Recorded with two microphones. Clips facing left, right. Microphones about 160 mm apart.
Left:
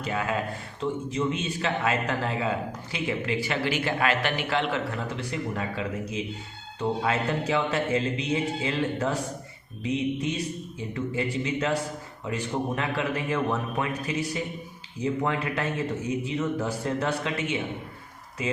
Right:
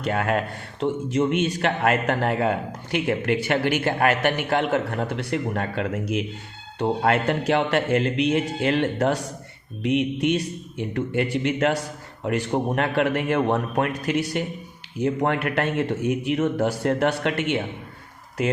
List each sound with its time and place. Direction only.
0.0 s a man's voice: 65° right (ahead or behind)